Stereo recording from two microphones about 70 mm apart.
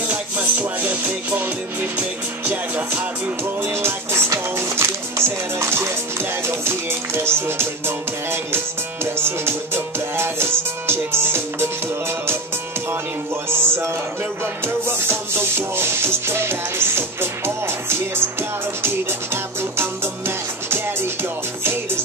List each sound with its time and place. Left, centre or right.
0.1 s music: right
13.5 s music: right